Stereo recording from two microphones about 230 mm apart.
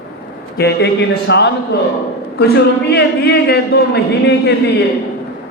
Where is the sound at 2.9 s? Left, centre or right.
Left.